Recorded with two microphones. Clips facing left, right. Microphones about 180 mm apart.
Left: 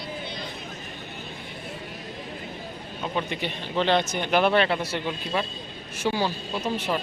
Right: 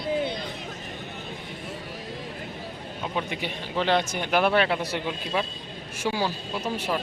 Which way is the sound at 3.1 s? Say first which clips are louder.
Left 1 dB; 5° right (ahead or behind).